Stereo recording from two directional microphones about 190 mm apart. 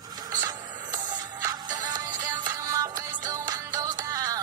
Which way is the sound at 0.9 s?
20° right (ahead or behind).